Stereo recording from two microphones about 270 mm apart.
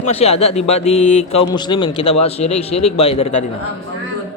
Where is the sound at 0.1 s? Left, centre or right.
Left.